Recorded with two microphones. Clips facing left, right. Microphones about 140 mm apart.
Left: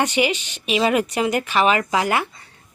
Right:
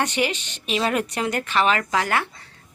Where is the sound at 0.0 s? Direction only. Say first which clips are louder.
Left 3 dB; 5° left (ahead or behind).